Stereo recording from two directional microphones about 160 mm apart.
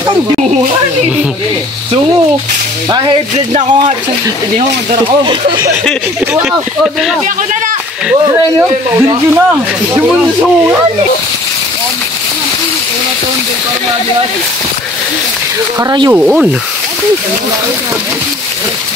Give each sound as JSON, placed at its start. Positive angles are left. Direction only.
{"t": 2.9, "sound": "speech", "side_deg": -25}
{"t": 5.0, "sound": "speech", "side_deg": -30}
{"t": 9.3, "sound": "speech", "side_deg": -10}
{"t": 15.8, "sound": "speech", "side_deg": -25}
{"t": 16.1, "sound": "speech", "side_deg": -10}